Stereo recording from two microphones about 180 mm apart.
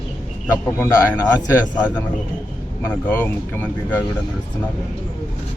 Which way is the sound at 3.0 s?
10° left (ahead or behind).